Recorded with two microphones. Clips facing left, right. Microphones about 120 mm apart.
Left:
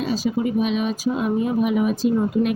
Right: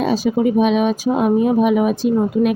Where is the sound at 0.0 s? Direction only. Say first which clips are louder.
Right 6 dB; 70° right (ahead or behind).